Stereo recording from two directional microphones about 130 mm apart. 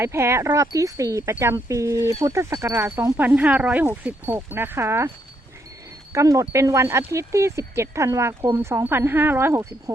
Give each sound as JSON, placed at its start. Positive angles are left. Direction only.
{"t": 0.0, "sound": "speech", "side_deg": -20}
{"t": 3.2, "sound": "speech", "side_deg": -10}
{"t": 6.1, "sound": "speech", "side_deg": -25}